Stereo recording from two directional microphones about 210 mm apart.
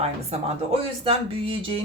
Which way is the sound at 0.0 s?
30° right (ahead or behind).